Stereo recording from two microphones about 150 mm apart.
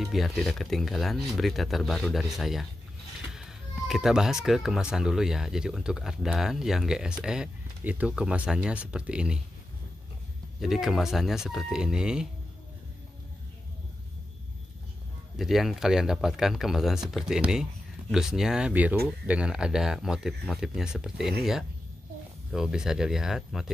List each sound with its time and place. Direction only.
0.0 s speech: centre (ahead or behind)
10.6 s speech: centre (ahead or behind)
15.3 s speech: centre (ahead or behind)
22.5 s speech: 5° right (ahead or behind)